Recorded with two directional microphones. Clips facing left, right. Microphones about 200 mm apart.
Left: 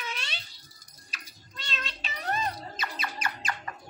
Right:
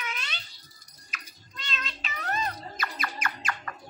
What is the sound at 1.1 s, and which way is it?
Music, 30° left (ahead or behind).